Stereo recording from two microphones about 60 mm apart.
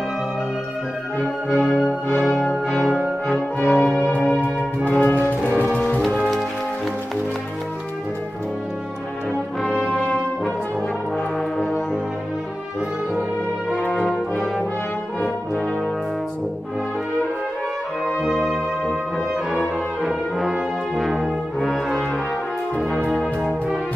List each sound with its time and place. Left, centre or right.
1.6 s music: centre
4.3 s brass instrument: left
5.0 s music: left
6.0 s music: centre
9.6 s brass instrument: centre
13.7 s brass instrument: centre
18.0 s brass instrument: centre
23.0 s brass instrument: centre